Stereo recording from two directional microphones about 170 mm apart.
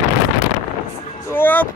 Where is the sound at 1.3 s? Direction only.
10° left (ahead or behind).